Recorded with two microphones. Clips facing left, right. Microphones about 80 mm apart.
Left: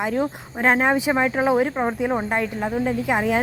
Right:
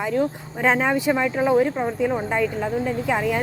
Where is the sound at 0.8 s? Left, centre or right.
Centre.